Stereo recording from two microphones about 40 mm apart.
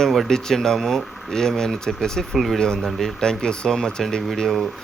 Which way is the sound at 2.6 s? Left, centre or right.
Centre.